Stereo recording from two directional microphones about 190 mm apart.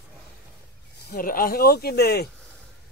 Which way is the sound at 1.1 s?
50° left (ahead or behind).